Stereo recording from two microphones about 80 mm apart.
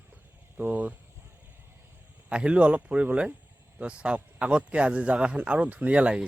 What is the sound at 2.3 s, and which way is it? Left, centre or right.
Speech, centre.